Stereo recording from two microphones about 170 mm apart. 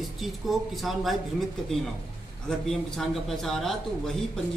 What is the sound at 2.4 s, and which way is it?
Speech, centre (ahead or behind).